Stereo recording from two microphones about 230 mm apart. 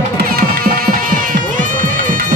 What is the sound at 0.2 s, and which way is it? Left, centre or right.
Music, right.